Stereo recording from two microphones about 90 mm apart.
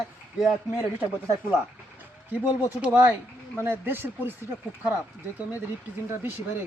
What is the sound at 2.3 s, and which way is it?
Speech, 20° right (ahead or behind).